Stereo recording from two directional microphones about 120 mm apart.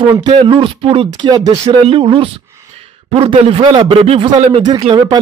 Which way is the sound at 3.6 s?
40° right (ahead or behind).